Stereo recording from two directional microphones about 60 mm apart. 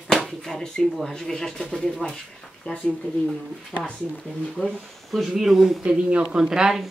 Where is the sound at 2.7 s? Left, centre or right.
Left.